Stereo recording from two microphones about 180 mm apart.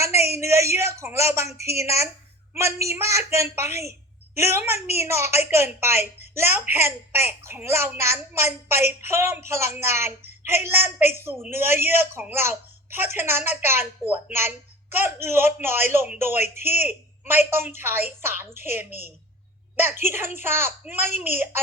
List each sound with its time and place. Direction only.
0.0 s a man's voice: 15° right (ahead or behind)